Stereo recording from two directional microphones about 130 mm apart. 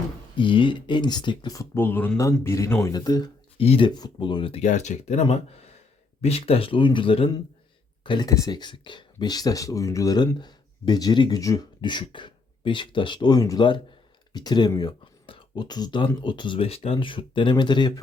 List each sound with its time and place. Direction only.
0.3 s speech: 40° left (ahead or behind)
1.5 s speech: 15° left (ahead or behind)
2.8 s speech: 30° left (ahead or behind)
3.6 s speech: 45° left (ahead or behind)
4.6 s speech: 65° left (ahead or behind)
5.2 s speech: 50° left (ahead or behind); by 18.0 s 35° left (ahead or behind)